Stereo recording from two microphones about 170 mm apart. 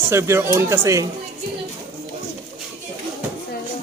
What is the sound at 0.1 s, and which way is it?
Speech, 15° right (ahead or behind).